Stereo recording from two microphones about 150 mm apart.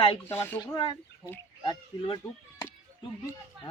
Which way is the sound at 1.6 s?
30° left (ahead or behind).